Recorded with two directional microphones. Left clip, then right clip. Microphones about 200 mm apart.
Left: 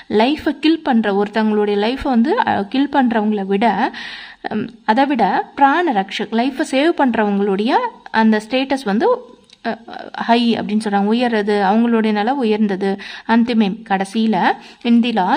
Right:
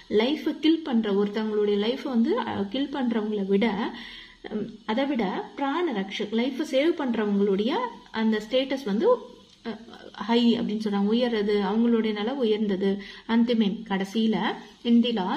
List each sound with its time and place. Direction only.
0.1 s a woman's voice: 40° left (ahead or behind)